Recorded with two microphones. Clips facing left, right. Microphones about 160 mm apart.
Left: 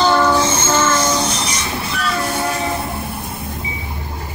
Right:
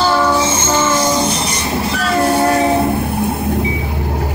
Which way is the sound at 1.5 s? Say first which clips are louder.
Right 5 dB; 35° right (ahead or behind).